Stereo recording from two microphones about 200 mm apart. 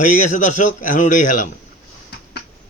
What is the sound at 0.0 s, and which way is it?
Speech, 40° left (ahead or behind).